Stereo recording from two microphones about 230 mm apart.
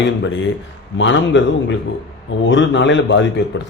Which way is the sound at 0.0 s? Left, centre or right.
Left.